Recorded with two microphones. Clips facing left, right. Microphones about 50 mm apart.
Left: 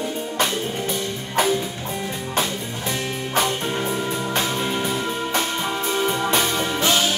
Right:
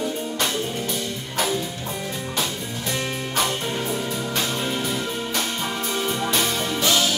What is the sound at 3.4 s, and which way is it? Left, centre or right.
Music, centre.